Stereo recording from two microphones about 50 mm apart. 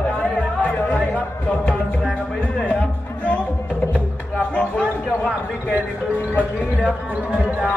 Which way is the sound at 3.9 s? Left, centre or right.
Left.